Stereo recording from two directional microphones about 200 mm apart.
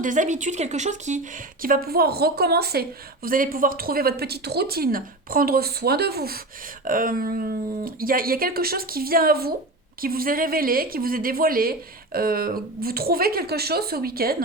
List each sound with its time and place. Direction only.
0.0 s speech: 40° right (ahead or behind)